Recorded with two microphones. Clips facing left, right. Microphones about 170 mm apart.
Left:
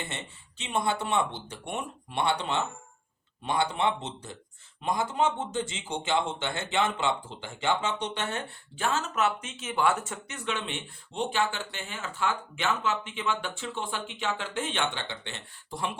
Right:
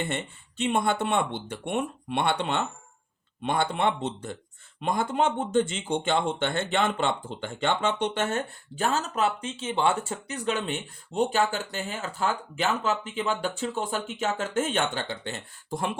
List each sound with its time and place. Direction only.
0.1 s speech: 55° right (ahead or behind)